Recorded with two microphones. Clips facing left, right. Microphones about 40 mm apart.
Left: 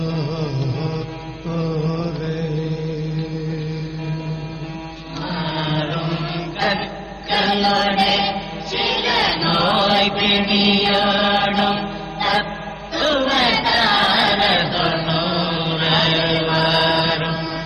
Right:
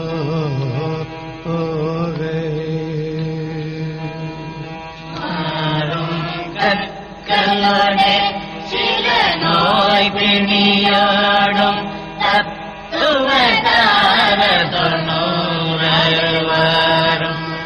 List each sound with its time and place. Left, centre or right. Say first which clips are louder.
0.0 s music: right 3 dB; centre
1.7 s mantra: right 3 dB; centre
5.2 s chant: right 3 dB; centre
11.5 s mantra: right 3 dB; right
12.2 s music: right 4 dB; right
12.9 s a sound: right 4 dB; right
14.7 s chant: right 3 dB; right
17.0 s mantra: right 4 dB; right